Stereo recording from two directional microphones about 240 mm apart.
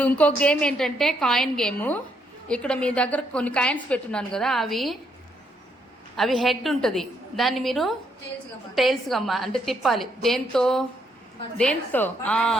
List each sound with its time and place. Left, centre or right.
0.0 s a woman's voice: centre
6.1 s a woman's voice: centre